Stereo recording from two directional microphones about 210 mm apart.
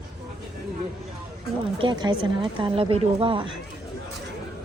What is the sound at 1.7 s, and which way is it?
Speech, 20° right (ahead or behind).